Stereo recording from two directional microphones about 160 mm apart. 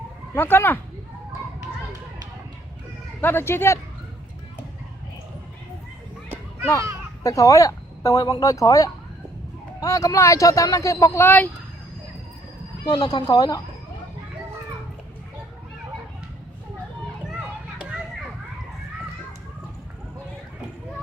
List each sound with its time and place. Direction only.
0.3 s speech: 15° left (ahead or behind)
3.2 s speech: 15° left (ahead or behind)
6.2 s children playing: 15° right (ahead or behind)
7.2 s speech: 20° left (ahead or behind)
12.8 s speech: 25° left (ahead or behind)